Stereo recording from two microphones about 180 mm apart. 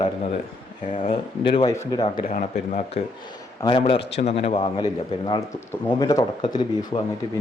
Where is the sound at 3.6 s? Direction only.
30° left (ahead or behind).